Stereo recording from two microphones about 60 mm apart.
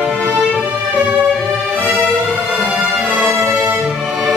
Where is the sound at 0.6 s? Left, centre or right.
Right.